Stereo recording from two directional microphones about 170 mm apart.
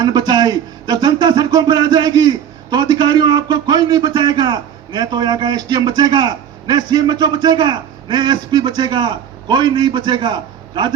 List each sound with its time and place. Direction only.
0.0 s speech: 25° right (ahead or behind)